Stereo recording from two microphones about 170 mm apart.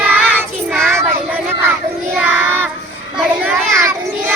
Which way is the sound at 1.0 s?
15° right (ahead or behind).